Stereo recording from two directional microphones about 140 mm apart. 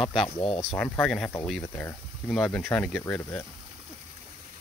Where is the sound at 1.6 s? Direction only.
20° left (ahead or behind).